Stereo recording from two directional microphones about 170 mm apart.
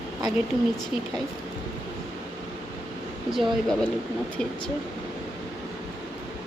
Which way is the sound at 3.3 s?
Centre (ahead or behind).